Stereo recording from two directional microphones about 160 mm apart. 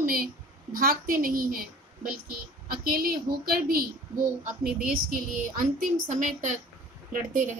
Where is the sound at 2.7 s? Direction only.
70° right (ahead or behind).